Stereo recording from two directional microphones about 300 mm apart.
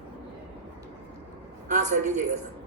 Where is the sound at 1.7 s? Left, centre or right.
Right.